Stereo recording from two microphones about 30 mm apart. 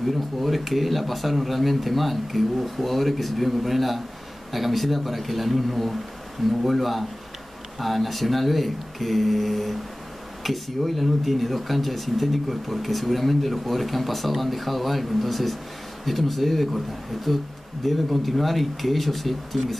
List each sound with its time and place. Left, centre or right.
0.4 s speech: centre